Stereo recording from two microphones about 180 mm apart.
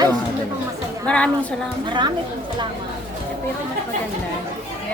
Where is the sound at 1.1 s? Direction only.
5° left (ahead or behind).